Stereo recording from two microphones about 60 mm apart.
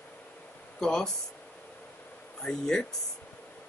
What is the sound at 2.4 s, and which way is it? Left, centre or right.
Speech, centre.